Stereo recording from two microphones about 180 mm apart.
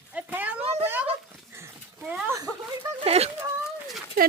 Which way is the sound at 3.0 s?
35° right (ahead or behind).